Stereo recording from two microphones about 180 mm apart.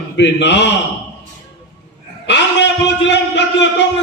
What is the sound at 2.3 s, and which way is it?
A man's voice, 75° left (ahead or behind).